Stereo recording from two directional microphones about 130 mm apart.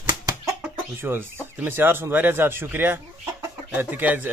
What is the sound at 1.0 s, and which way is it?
Speech, 15° right (ahead or behind).